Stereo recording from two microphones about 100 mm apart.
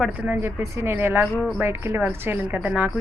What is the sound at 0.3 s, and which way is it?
A woman's voice, 25° right (ahead or behind).